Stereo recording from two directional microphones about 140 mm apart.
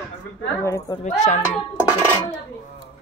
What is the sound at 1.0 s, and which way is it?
Speech, 55° left (ahead or behind).